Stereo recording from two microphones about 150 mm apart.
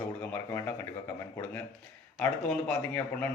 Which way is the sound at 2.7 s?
10° left (ahead or behind).